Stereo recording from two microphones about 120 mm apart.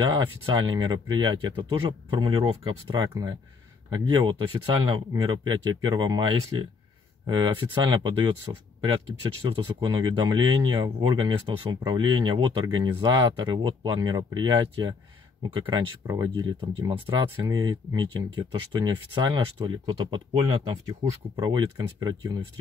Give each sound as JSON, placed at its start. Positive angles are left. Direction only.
{"t": 0.0, "sound": "speech", "side_deg": -40}
{"t": 9.8, "sound": "speech", "side_deg": -40}
{"t": 20.4, "sound": "speech", "side_deg": -30}